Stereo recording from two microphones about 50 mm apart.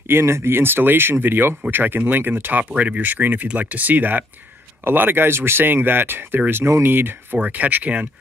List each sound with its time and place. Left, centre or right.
0.1 s speech: right
2.7 s speech: right
3.0 s speech: right
7.4 s speech: right